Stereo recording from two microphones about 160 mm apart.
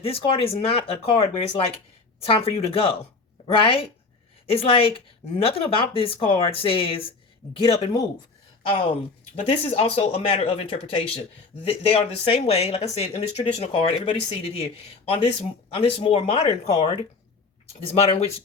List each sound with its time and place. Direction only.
0.0 s speech: 35° left (ahead or behind)
9.3 s speech: 40° left (ahead or behind)